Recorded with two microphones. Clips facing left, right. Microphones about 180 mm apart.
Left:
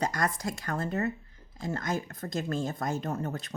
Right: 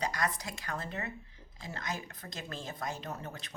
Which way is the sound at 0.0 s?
45° left (ahead or behind).